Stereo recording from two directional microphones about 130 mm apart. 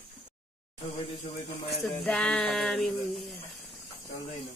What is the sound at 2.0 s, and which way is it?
Speech, 10° left (ahead or behind).